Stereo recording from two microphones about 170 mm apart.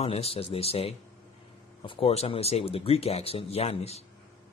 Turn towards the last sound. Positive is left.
turn(degrees=40)  # may be behind; listen again after turning